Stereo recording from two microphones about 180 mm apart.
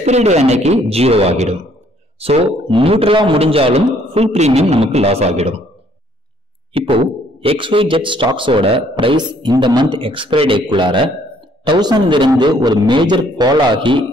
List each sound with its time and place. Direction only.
0.0 s a man's voice: 40° right (ahead or behind)
6.7 s speech: 30° right (ahead or behind)